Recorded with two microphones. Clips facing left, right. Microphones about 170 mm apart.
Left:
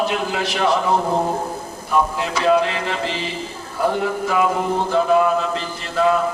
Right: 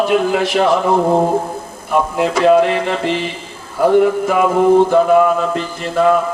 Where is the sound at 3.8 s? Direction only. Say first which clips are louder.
Right 9 dB; 50° right (ahead or behind).